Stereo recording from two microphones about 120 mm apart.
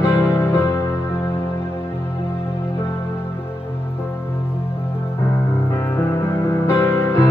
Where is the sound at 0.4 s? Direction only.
25° left (ahead or behind).